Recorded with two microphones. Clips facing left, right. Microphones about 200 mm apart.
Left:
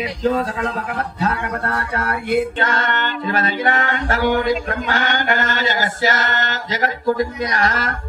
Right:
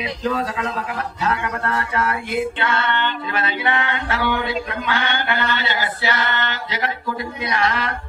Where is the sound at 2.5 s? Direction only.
40° left (ahead or behind).